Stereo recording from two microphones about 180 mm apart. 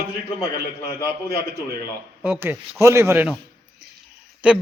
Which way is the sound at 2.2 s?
10° right (ahead or behind).